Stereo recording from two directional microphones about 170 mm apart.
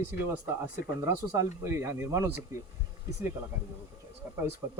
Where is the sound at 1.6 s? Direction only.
15° right (ahead or behind).